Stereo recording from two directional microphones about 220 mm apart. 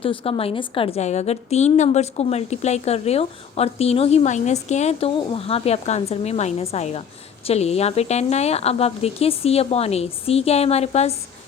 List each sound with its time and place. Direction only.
0.0 s a woman's voice: 25° left (ahead or behind)